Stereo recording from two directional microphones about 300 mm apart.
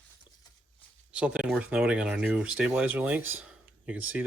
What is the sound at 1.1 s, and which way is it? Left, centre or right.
Speech, centre.